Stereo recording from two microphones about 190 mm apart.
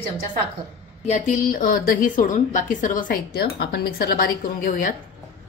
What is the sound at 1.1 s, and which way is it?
A woman's voice, 40° left (ahead or behind).